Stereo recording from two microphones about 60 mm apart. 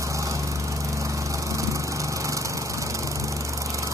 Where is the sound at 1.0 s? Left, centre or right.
Right.